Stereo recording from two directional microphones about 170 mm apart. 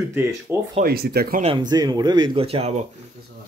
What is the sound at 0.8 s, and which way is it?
Speech, 65° right (ahead or behind).